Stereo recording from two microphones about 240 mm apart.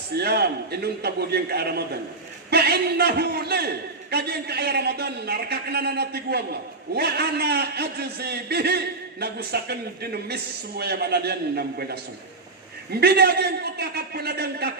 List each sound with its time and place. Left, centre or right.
0.1 s a man's voice: right